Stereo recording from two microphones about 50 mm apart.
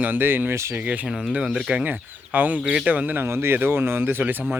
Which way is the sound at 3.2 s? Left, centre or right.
Right.